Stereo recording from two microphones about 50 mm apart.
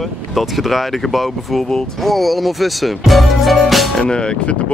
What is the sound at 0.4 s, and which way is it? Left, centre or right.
Speech, centre.